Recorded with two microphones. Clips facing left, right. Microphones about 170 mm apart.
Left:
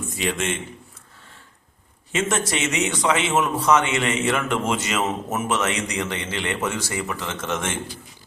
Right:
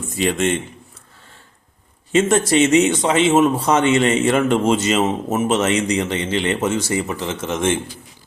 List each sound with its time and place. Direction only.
0.2 s speech: 35° right (ahead or behind)
2.5 s a man's voice: 30° right (ahead or behind)